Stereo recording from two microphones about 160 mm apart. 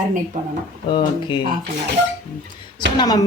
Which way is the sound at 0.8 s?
30° left (ahead or behind).